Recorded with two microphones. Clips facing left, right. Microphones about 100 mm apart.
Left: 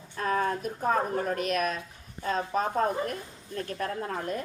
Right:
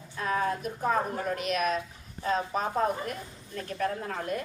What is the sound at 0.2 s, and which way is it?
A woman's voice, 45° left (ahead or behind).